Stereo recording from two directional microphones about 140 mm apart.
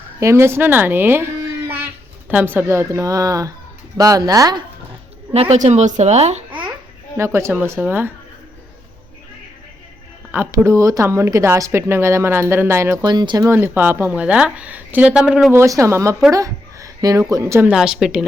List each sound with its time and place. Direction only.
0.2 s speech: 20° right (ahead or behind)
5.3 s a woman's voice: 50° right (ahead or behind)
6.5 s babbling: 10° right (ahead or behind)
7.2 s a woman's voice: 20° right (ahead or behind)
10.3 s speech: 15° right (ahead or behind)
13.1 s speech: 30° right (ahead or behind)
13.5 s a woman's voice: 15° right (ahead or behind)
15.5 s a woman's voice: 20° right (ahead or behind)
17.7 s a woman's voice: 5° right (ahead or behind)